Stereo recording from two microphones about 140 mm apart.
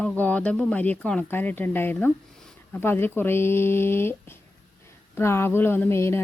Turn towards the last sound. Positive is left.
turn(degrees=20)  # may be behind; listen again after turning